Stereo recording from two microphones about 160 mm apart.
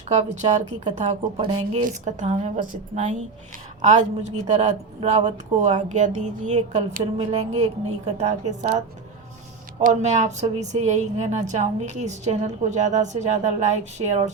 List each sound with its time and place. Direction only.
0.1 s a woman's voice: 45° right (ahead or behind)
9.8 s a woman's voice: 50° right (ahead or behind)